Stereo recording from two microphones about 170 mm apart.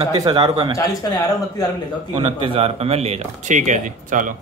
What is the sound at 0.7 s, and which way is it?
Speech, 20° left (ahead or behind).